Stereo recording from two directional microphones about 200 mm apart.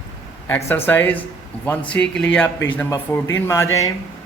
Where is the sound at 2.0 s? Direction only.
60° left (ahead or behind).